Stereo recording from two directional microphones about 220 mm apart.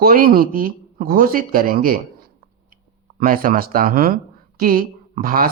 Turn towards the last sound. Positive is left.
turn(degrees=-40)  # may be behind; listen again after turning